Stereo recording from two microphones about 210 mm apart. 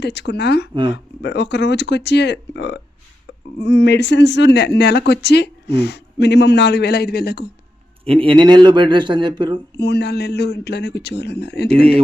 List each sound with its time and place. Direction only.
0.0 s speech: 55° left (ahead or behind)
0.7 s speech: 25° right (ahead or behind)
1.2 s speech: 55° left (ahead or behind)
8.0 s speech: 25° right (ahead or behind)
9.7 s speech: 55° left (ahead or behind)